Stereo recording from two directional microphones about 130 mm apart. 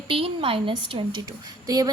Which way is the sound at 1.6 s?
30° right (ahead or behind).